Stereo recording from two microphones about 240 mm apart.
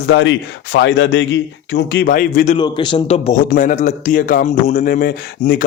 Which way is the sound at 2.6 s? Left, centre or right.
Centre.